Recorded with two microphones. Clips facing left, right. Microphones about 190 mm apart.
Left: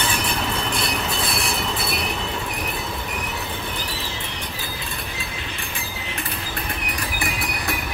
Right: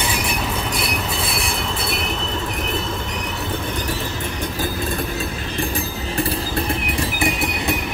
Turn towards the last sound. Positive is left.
turn(degrees=-25)  # may be behind; listen again after turning